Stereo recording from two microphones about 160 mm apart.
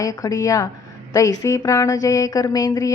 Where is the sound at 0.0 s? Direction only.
20° left (ahead or behind).